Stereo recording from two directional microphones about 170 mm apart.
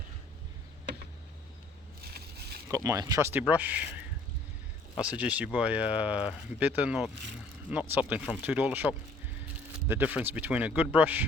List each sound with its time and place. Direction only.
2.0 s a sound: 65° right (ahead or behind)
2.6 s speech: 15° right (ahead or behind)
3.4 s speech: 10° right (ahead or behind)
4.9 s speech: 10° right (ahead or behind)